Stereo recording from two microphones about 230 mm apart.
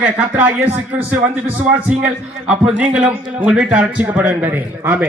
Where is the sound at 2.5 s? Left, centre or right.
Centre.